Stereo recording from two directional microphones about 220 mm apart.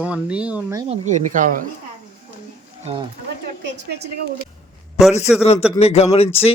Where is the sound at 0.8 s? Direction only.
35° right (ahead or behind).